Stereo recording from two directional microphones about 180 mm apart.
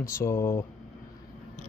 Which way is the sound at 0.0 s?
15° left (ahead or behind).